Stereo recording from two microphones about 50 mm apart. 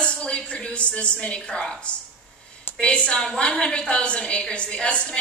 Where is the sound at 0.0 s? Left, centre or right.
Left.